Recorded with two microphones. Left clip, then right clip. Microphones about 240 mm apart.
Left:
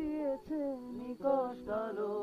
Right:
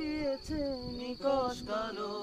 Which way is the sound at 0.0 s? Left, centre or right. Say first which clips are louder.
Right 1 dB; right.